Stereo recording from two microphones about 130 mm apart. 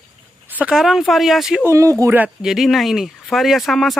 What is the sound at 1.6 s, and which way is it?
Speech, 25° right (ahead or behind).